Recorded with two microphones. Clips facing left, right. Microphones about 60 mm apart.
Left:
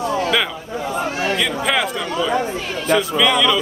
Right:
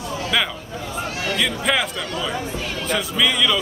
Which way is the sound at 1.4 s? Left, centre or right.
Centre.